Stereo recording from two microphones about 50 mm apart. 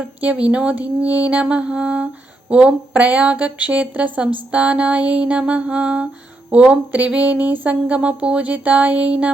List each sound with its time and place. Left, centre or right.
0.2 s speech: right
7.1 s speech: right